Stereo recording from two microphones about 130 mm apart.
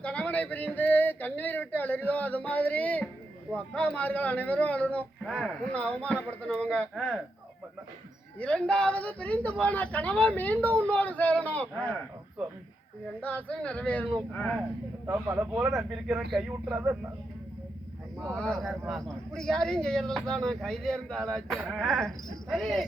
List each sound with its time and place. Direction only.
0.0 s speech: 10° left (ahead or behind)
8.4 s speech: 10° left (ahead or behind)
13.2 s speech: 10° left (ahead or behind)
15.0 s speech: 15° right (ahead or behind)
16.7 s speech: 15° right (ahead or behind)
18.2 s speech: 5° left (ahead or behind)